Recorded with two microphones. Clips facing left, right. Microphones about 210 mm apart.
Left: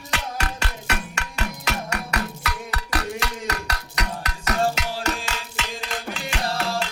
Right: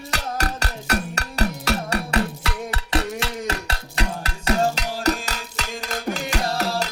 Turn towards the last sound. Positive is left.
turn(degrees=-40)  # may be behind; listen again after turning